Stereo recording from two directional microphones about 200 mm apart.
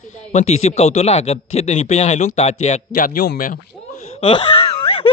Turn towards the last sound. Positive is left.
turn(degrees=25)  # may be behind; listen again after turning